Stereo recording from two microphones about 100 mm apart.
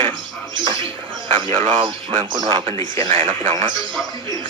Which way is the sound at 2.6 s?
85° right.